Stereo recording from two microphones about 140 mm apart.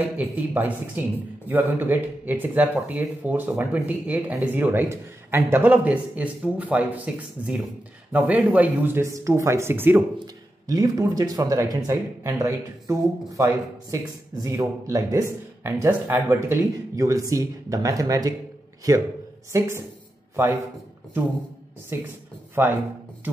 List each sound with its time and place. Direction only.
0.2 s speech: 15° right (ahead or behind)
10.1 s speech: 25° right (ahead or behind)
21.9 s speech: 15° right (ahead or behind)